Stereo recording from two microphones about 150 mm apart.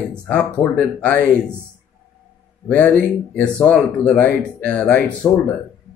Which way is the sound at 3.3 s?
5° left (ahead or behind).